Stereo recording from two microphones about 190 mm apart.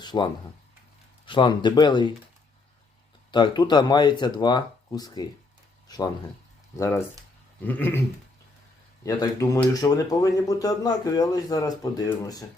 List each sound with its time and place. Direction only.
0.0 s a man's voice: 20° left (ahead or behind)
3.3 s a man's voice: 25° left (ahead or behind)
6.7 s a sound: 15° left (ahead or behind)
9.0 s a man's voice: 20° left (ahead or behind)